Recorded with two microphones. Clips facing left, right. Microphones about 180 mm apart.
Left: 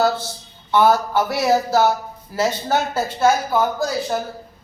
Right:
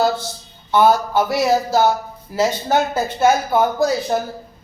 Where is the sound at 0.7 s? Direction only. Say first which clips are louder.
Right 1 dB; 15° right (ahead or behind).